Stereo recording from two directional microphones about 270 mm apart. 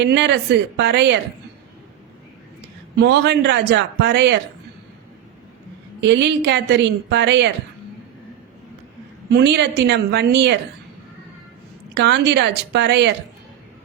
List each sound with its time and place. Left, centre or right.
0.0 s a woman's voice: right
3.0 s a woman's voice: right
6.0 s a woman's voice: right
9.3 s a woman's voice: right
11.9 s a woman's voice: right